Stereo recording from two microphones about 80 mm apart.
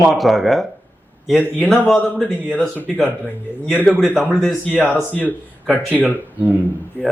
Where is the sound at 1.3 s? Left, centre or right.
Centre.